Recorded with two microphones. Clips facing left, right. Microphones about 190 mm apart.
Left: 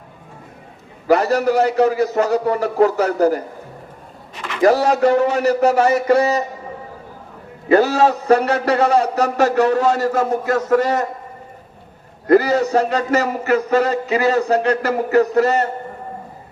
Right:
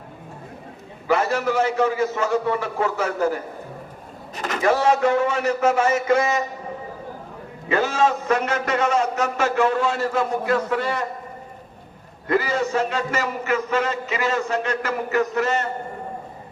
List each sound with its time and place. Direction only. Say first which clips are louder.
1.0 s a man's voice: left 6 dB; 40° left (ahead or behind)
4.4 s a sound: right 3 dB; 40° right (ahead or behind)
4.6 s a man's voice: left 5 dB; 40° left (ahead or behind)
7.7 s a man's voice: left 6 dB; 40° left (ahead or behind)
12.3 s a man's voice: left 8 dB; 40° left (ahead or behind)